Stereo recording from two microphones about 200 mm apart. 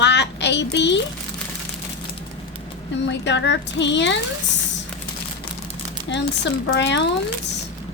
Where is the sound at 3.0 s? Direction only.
60° left (ahead or behind).